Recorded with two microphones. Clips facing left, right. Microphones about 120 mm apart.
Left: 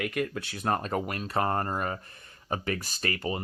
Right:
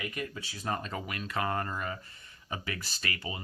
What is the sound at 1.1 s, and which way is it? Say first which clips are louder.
Speech: left 2 dB; 35° left (ahead or behind).